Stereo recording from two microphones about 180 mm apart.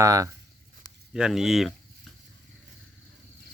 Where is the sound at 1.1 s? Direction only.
5° right (ahead or behind).